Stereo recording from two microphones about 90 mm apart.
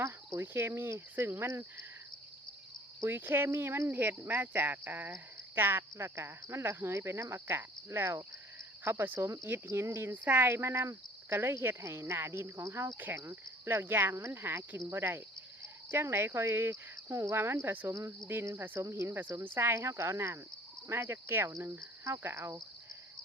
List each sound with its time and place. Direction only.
0.0 s speech: 30° right (ahead or behind)
3.0 s speech: 25° right (ahead or behind)